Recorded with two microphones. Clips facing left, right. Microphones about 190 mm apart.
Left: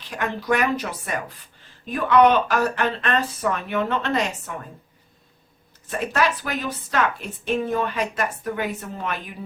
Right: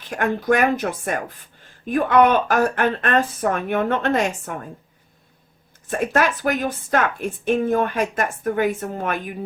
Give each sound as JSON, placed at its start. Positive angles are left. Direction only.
{"t": 0.1, "sound": "a woman's voice", "side_deg": -50}
{"t": 5.9, "sound": "a woman's voice", "side_deg": -50}